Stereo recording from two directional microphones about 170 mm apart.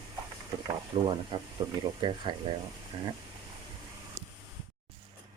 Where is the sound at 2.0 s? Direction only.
25° right (ahead or behind).